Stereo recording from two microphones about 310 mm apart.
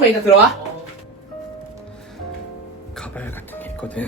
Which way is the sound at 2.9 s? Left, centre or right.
Centre.